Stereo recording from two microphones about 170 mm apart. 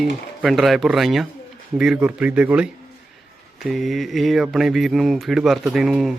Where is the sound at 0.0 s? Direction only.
Centre (ahead or behind).